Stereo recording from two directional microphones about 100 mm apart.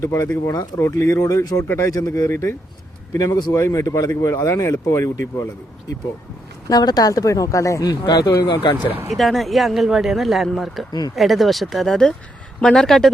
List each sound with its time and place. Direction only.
0.0 s speech: 25° left (ahead or behind)
3.5 s speech: 30° left (ahead or behind)
6.7 s speech: 40° left (ahead or behind)
9.0 s speech: centre (ahead or behind)